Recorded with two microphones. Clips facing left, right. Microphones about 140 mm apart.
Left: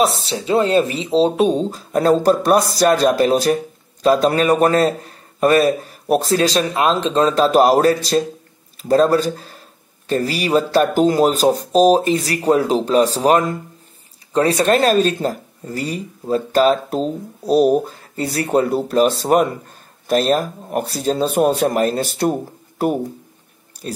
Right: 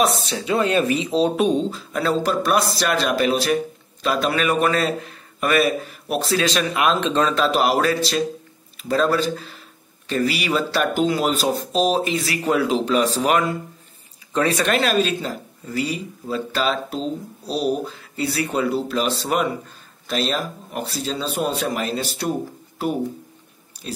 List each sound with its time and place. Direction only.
0.0 s a man's voice: 30° left (ahead or behind); by 22.3 s 50° left (ahead or behind)